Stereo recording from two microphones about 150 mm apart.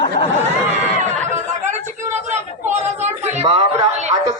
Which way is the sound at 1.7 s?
50° right (ahead or behind).